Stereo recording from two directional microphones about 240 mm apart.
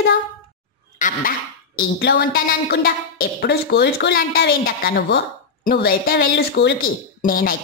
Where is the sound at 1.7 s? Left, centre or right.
Left.